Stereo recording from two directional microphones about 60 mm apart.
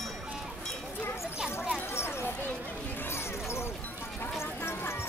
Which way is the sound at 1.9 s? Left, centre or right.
Left.